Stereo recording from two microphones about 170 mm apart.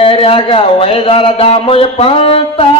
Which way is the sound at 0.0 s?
35° left (ahead or behind).